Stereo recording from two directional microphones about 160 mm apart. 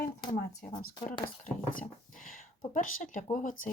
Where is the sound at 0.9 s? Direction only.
30° left (ahead or behind).